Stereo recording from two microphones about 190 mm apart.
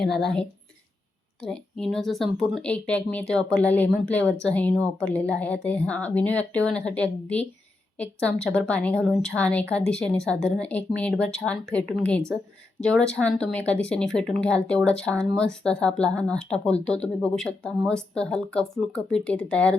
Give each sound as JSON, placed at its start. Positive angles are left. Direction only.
{"t": 1.5, "sound": "speech", "side_deg": 0}